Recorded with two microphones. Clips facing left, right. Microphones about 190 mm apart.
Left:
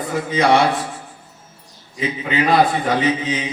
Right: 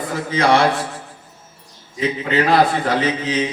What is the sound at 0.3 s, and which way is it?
Speech, 15° left (ahead or behind).